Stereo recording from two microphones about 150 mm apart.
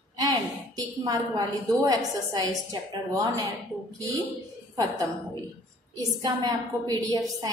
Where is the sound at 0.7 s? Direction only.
25° right (ahead or behind).